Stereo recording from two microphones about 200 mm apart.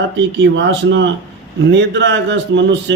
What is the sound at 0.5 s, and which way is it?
Speech, 65° right (ahead or behind).